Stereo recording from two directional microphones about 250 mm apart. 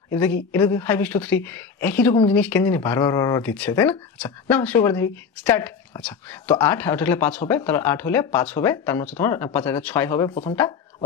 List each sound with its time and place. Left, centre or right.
0.1 s speech: centre